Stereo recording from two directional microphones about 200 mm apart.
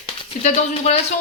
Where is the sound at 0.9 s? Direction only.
35° left (ahead or behind).